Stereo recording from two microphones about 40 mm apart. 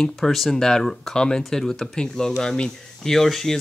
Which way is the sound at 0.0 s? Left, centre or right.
Centre.